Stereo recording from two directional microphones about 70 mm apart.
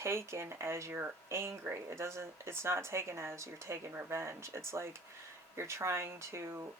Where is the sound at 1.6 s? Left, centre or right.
Right.